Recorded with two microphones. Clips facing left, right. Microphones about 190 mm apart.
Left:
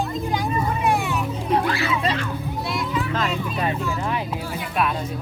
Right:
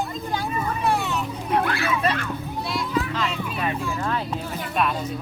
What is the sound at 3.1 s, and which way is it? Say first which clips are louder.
Speech: left 3 dB; 45° left (ahead or behind).